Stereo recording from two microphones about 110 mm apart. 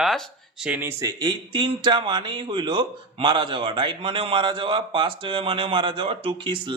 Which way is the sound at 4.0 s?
55° right (ahead or behind).